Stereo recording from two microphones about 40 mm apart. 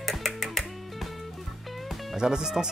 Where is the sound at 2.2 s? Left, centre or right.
Centre.